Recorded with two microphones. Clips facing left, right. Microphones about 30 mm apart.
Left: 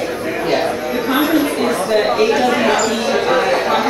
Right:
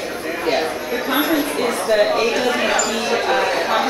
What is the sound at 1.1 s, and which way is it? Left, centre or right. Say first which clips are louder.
Speech: left 3 dB; centre.